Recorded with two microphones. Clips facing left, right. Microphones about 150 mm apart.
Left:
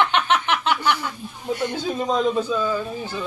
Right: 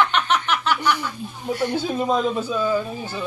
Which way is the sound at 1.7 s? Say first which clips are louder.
Right 3 dB; 5° right (ahead or behind).